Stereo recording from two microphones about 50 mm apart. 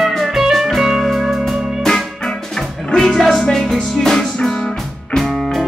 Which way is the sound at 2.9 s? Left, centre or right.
Centre.